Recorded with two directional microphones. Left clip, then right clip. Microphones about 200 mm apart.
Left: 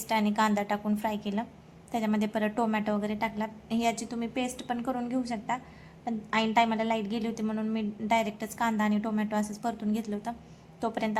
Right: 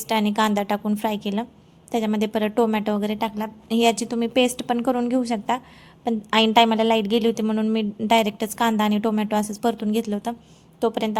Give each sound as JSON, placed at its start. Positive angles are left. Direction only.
{"t": 0.1, "sound": "a woman's voice", "side_deg": -30}
{"t": 3.3, "sound": "a woman's voice", "side_deg": -20}
{"t": 3.8, "sound": "a woman's voice", "side_deg": -45}